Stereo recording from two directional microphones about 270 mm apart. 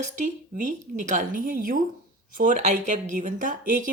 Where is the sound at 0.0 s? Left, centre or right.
Right.